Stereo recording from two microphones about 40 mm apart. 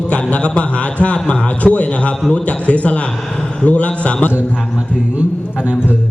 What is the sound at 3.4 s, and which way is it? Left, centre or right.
Speech, left.